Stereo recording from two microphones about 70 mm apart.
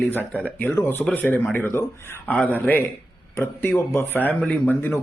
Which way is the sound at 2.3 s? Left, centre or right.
Left.